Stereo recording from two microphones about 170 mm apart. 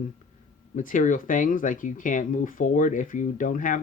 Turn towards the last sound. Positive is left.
turn(degrees=50)  # may be behind; listen again after turning